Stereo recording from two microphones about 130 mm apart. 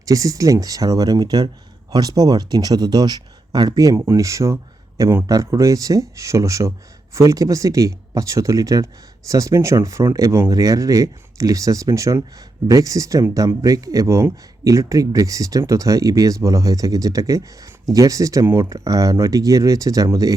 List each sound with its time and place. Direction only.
0.0 s speech: 25° right (ahead or behind)